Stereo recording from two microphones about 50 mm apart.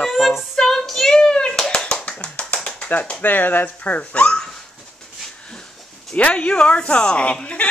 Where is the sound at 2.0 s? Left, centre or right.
Left.